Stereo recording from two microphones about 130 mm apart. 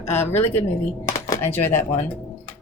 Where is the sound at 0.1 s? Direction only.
20° left (ahead or behind).